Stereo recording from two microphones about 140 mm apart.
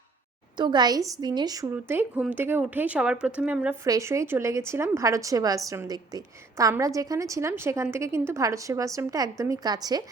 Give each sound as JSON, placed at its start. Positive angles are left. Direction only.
{"t": 0.5, "sound": "a woman's voice", "side_deg": -35}
{"t": 1.7, "sound": "a woman's voice", "side_deg": -15}
{"t": 3.8, "sound": "a woman's voice", "side_deg": -25}